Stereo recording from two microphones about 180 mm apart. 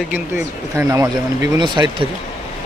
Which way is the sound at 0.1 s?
15° right (ahead or behind).